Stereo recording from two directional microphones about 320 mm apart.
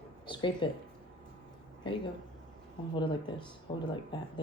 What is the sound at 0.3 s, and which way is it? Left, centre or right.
Speech, centre.